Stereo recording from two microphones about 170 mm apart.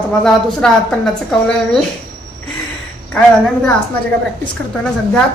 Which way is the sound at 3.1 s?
10° left (ahead or behind).